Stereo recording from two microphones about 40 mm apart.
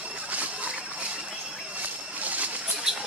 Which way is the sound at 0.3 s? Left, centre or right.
Right.